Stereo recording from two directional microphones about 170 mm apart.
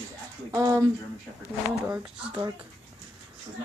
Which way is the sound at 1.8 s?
10° right (ahead or behind).